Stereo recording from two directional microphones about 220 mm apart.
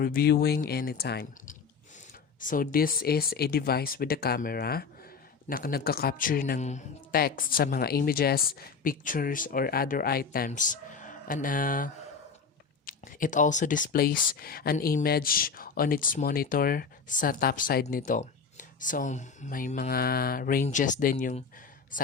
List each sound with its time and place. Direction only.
0.0 s speech: 45° left (ahead or behind)